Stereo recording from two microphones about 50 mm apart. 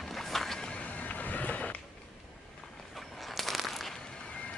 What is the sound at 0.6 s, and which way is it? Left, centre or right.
Music, left.